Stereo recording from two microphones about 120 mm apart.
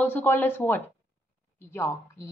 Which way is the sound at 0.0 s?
15° left (ahead or behind).